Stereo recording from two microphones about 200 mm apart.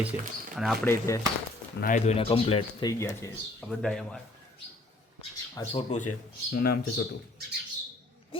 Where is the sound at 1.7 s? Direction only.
40° left (ahead or behind); by 3.3 s 15° left (ahead or behind).